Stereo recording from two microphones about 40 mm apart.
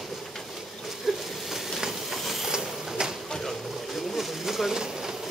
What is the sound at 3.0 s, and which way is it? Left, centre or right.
Pigeon, centre.